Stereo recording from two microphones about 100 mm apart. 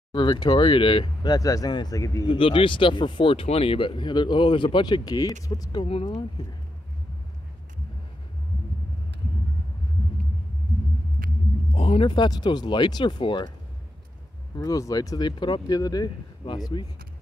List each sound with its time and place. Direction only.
0.1 s speech: 50° left (ahead or behind); by 2.2 s 35° left (ahead or behind)
2.2 s speech: 60° left (ahead or behind)
11.7 s vehicle: 80° left
12.1 s speech: 45° left (ahead or behind)
14.6 s speech: 35° left (ahead or behind)